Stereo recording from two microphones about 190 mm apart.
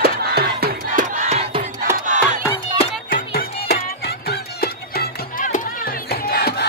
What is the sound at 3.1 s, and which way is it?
Music, 50° left (ahead or behind).